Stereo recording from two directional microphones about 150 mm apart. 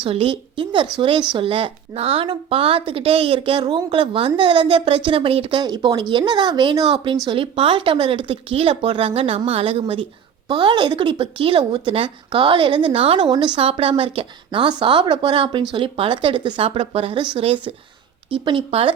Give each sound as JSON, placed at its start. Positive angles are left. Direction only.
{"t": 0.0, "sound": "a woman's voice", "side_deg": -40}
{"t": 13.3, "sound": "speech", "side_deg": -30}